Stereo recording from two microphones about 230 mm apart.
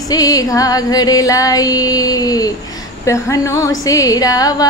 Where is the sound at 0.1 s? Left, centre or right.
Centre.